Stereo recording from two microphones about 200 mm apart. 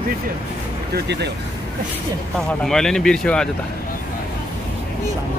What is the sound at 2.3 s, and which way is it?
Speech, centre (ahead or behind).